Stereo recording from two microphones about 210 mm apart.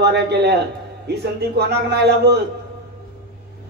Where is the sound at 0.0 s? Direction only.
50° right (ahead or behind).